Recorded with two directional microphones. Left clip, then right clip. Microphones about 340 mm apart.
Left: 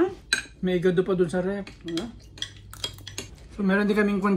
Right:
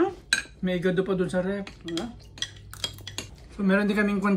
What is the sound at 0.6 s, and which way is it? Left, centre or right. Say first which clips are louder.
Speech: left 3 dB; centre.